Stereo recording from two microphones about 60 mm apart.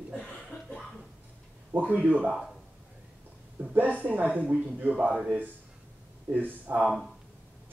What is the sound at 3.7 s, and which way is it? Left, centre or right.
A woman's voice, right.